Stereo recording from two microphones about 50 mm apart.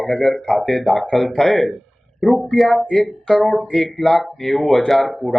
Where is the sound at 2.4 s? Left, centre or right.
Centre.